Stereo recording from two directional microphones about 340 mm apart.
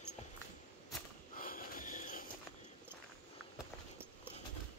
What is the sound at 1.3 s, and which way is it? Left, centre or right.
Wheeze, left.